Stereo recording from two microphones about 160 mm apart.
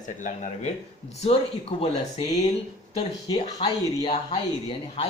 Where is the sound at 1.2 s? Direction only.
40° left (ahead or behind).